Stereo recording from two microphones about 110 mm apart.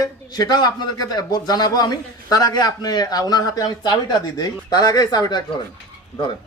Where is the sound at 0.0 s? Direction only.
40° left (ahead or behind).